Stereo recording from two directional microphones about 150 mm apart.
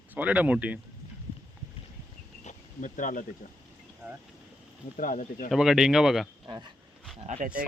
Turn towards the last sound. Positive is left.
turn(degrees=-65)  # may be behind; listen again after turning